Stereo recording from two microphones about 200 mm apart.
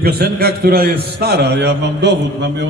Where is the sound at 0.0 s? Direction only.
50° right (ahead or behind).